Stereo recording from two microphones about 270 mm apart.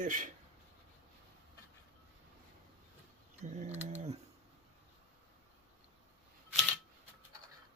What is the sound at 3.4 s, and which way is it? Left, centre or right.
Pigeon, right.